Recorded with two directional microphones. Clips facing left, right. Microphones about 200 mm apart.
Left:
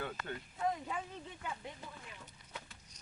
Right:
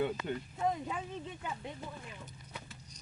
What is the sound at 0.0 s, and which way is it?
Speech, 20° right (ahead or behind).